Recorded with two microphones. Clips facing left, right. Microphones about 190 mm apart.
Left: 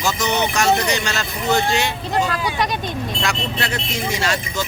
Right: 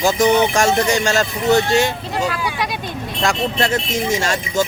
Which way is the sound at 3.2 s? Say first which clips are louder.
Right 9 dB; 45° right (ahead or behind).